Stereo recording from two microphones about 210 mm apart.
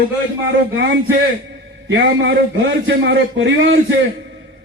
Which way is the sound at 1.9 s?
60° right (ahead or behind).